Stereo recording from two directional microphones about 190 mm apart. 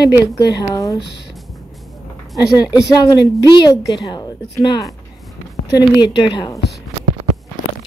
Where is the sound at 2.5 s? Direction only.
20° left (ahead or behind).